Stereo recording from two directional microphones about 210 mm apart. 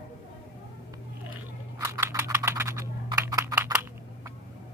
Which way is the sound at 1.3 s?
10° right (ahead or behind).